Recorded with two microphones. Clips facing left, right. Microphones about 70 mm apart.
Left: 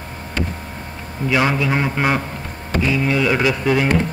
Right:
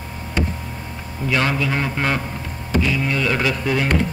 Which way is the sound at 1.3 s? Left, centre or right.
Centre.